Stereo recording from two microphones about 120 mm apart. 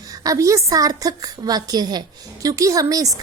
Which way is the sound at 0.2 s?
30° right (ahead or behind).